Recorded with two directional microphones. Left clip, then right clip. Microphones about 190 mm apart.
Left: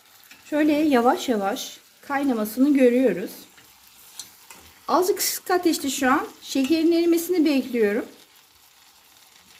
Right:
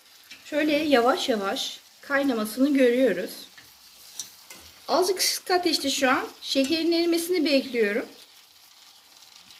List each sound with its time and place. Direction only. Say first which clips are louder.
0.5 s a woman's voice: left 2 dB; 45° left (ahead or behind)
4.9 s speech: left 2 dB; 50° left (ahead or behind)